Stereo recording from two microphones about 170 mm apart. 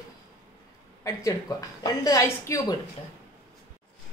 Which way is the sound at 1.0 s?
20° left (ahead or behind).